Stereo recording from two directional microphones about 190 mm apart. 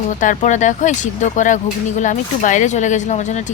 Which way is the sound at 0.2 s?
40° left (ahead or behind).